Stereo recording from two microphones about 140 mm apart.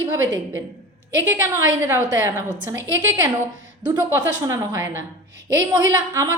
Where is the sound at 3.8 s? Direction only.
25° right (ahead or behind).